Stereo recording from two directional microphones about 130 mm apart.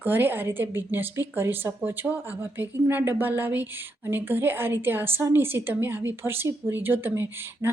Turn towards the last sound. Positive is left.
turn(degrees=-15)  # may be behind; listen again after turning